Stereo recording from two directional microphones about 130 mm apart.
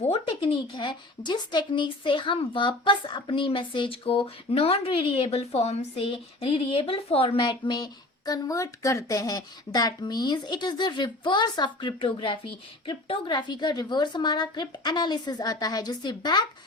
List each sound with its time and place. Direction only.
0.0 s a woman's voice: 45° left (ahead or behind)